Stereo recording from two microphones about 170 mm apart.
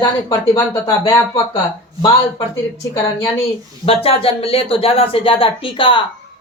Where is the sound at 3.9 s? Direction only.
35° left (ahead or behind).